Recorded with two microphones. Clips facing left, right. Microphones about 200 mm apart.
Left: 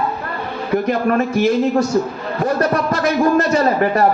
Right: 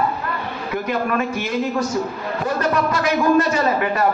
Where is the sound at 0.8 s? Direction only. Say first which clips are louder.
Left 2 dB; 40° left (ahead or behind).